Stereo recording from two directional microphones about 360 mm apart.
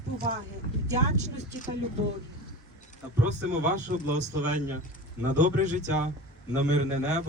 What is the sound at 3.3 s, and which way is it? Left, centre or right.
A man's voice, centre.